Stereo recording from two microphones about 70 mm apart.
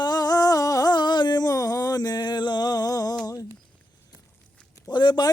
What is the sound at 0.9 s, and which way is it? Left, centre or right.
Music, left.